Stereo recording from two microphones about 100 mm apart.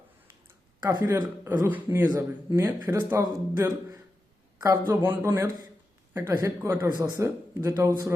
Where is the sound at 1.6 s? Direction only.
20° right (ahead or behind).